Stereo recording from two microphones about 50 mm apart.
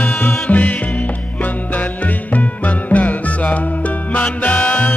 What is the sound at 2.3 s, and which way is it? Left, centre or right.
Music, left.